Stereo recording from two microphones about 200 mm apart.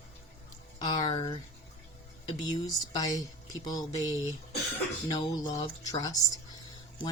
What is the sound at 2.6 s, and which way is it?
Speech, 20° left (ahead or behind).